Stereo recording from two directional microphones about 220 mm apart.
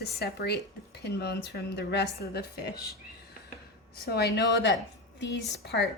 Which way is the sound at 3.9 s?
45° left (ahead or behind).